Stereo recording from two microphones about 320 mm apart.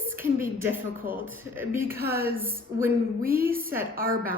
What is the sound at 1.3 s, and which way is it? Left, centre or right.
Speech, centre.